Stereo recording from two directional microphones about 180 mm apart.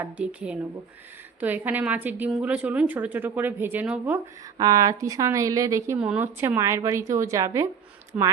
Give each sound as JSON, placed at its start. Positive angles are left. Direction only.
{"t": 0.0, "sound": "a woman's voice", "side_deg": -5}
{"t": 4.5, "sound": "a woman's voice", "side_deg": -20}